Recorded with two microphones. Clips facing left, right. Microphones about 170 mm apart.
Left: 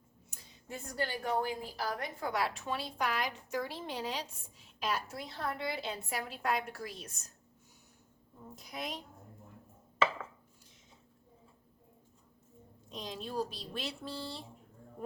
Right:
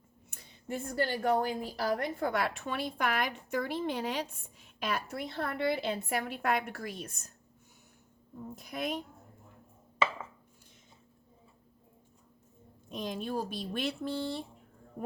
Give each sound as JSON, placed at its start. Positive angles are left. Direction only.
{"t": 0.3, "sound": "a woman's voice", "side_deg": -60}
{"t": 8.5, "sound": "a woman's voice", "side_deg": -55}
{"t": 12.9, "sound": "a woman's voice", "side_deg": -55}